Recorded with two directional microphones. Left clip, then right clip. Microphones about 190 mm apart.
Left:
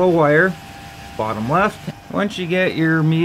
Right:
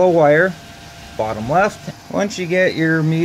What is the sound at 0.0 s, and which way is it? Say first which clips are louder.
Speech: right 2 dB; 5° left (ahead or behind).